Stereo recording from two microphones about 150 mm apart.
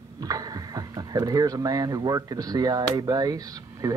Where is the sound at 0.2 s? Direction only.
25° right (ahead or behind).